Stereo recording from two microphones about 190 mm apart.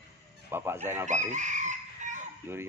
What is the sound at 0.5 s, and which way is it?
Speech, 10° right (ahead or behind).